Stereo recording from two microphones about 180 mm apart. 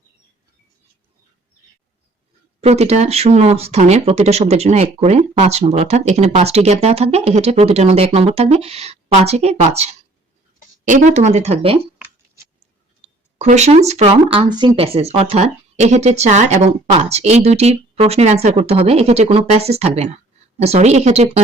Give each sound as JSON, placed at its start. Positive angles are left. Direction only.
{"t": 2.6, "sound": "speech", "side_deg": -35}
{"t": 13.0, "sound": "speech", "side_deg": -40}